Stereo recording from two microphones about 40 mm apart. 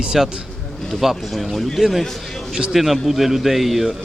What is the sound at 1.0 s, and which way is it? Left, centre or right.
A man's voice, centre.